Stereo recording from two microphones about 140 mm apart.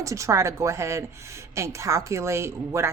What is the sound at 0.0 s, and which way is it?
A woman's voice, 20° right (ahead or behind).